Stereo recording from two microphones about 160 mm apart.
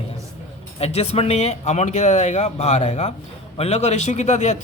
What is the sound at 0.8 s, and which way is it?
Speech, 40° left (ahead or behind).